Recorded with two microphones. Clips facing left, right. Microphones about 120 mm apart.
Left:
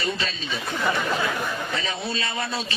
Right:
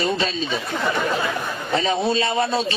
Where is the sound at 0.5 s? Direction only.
45° right (ahead or behind).